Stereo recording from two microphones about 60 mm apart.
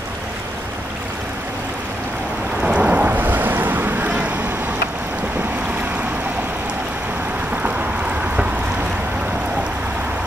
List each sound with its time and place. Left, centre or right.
2.6 s boat: right